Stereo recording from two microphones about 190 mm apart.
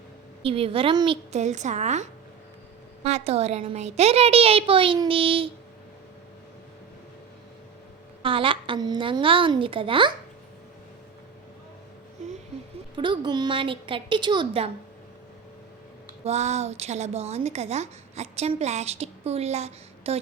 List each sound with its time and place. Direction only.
0.4 s a woman's voice: 30° right (ahead or behind)
8.2 s a woman's voice: 25° right (ahead or behind)
13.0 s a woman's voice: 25° right (ahead or behind)
16.2 s a woman's voice: 35° right (ahead or behind)